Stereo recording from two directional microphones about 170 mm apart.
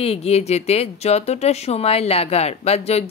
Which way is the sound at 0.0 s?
35° left (ahead or behind).